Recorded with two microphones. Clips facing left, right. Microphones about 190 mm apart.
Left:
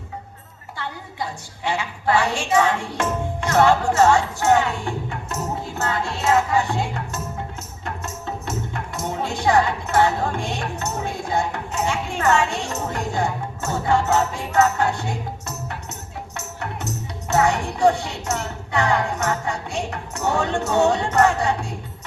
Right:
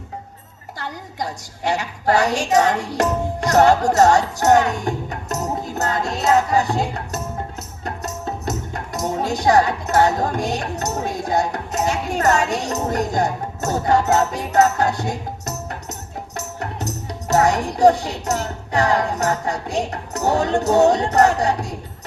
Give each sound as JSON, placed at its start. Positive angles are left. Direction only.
{"t": 0.8, "sound": "a woman's voice", "side_deg": -40}